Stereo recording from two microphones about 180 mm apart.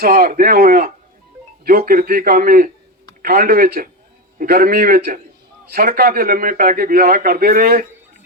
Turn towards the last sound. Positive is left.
turn(degrees=-55)  # may be behind; listen again after turning